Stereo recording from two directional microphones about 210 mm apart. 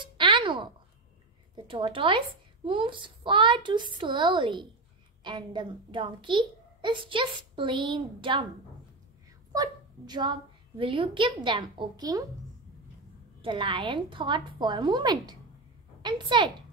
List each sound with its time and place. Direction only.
0.0 s a sound: 25° right (ahead or behind)
1.5 s a child's voice: 20° right (ahead or behind)
9.5 s a child's voice: 20° right (ahead or behind)
13.4 s a child's voice: 25° right (ahead or behind)